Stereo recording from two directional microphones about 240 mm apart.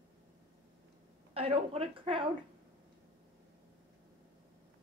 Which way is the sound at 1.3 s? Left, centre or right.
Right.